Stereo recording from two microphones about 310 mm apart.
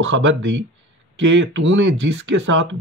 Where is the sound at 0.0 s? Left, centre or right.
Right.